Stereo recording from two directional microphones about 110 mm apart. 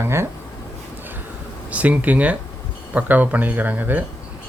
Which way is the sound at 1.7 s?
15° right (ahead or behind).